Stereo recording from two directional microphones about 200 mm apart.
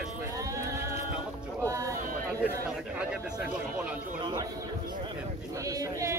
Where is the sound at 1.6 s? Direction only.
15° right (ahead or behind).